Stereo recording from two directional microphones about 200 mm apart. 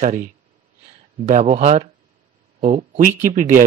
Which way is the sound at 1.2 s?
35° right (ahead or behind).